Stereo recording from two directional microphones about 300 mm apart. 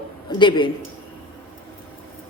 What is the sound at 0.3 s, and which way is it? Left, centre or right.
Speech, centre.